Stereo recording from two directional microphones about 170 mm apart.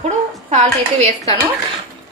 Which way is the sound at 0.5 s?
40° right (ahead or behind).